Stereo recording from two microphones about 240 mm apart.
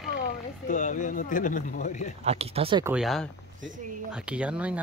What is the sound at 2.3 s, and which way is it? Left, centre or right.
Speech, right.